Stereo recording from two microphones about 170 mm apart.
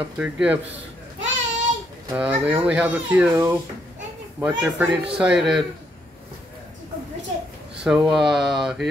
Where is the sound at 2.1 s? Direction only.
5° right (ahead or behind).